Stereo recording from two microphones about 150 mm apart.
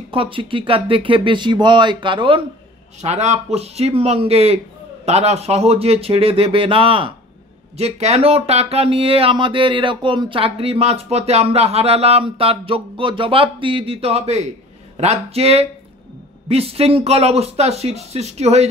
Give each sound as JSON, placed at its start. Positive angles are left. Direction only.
{"t": 0.1, "sound": "speech", "side_deg": -35}
{"t": 3.0, "sound": "speech", "side_deg": -50}